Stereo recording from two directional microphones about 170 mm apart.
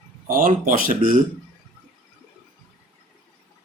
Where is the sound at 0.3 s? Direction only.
55° right (ahead or behind).